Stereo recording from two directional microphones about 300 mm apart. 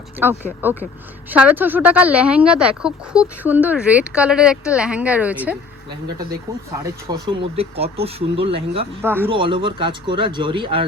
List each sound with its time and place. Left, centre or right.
0.2 s speech: centre
7.1 s speech: centre
9.0 s speech: centre